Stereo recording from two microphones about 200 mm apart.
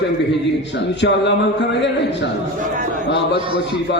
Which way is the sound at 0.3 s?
60° left (ahead or behind).